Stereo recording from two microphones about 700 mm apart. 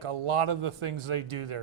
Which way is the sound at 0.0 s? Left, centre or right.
Right.